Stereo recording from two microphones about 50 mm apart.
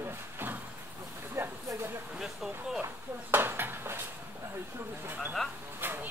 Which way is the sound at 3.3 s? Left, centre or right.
Right.